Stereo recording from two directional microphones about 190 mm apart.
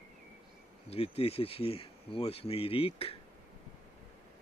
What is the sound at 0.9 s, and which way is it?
Speech, 30° left (ahead or behind).